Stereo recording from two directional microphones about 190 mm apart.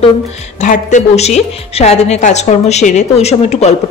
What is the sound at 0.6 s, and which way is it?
A woman's voice, 40° left (ahead or behind).